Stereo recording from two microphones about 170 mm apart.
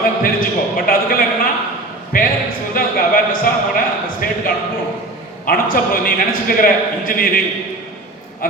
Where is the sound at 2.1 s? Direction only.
55° left (ahead or behind).